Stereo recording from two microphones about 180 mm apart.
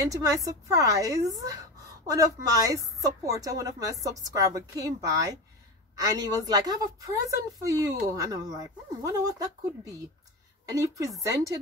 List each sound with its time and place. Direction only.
0.1 s a woman's voice: 20° right (ahead or behind)